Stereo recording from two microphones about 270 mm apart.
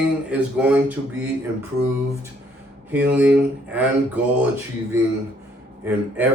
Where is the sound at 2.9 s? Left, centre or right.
Centre.